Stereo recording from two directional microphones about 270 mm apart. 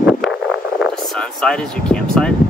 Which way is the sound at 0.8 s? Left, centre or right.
Centre.